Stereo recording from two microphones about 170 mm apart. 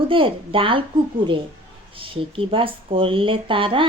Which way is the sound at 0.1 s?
30° right (ahead or behind).